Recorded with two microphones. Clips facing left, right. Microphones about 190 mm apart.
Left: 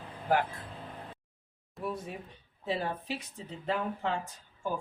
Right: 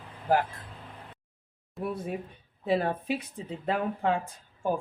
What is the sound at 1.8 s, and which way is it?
A woman's voice, 55° right (ahead or behind).